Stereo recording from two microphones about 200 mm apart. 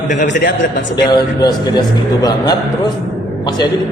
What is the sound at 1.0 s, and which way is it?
Speech, 20° left (ahead or behind).